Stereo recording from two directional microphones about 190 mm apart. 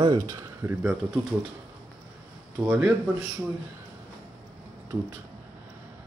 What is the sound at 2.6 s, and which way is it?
Speech, 10° right (ahead or behind).